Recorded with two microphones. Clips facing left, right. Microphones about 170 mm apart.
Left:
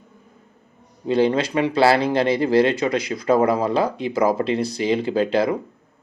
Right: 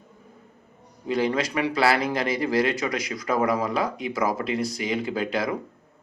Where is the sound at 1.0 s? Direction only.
30° left (ahead or behind).